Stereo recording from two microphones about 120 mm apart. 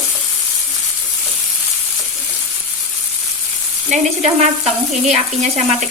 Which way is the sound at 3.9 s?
65° right (ahead or behind).